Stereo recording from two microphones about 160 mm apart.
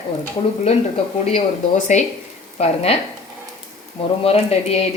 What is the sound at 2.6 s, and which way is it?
Speech, 40° left (ahead or behind).